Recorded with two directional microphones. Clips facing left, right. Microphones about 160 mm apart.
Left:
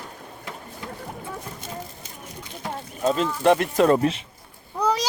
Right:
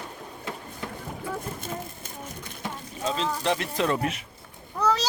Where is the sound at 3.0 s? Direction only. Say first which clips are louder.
Left 7 dB; 50° left (ahead or behind).